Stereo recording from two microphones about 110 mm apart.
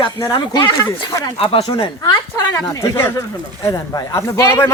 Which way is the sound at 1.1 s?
35° left (ahead or behind).